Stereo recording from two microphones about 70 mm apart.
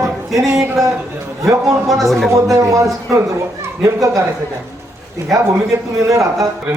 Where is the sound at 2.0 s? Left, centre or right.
Centre.